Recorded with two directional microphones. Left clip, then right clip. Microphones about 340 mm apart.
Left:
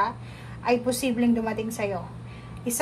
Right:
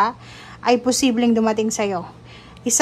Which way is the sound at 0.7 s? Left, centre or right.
Centre.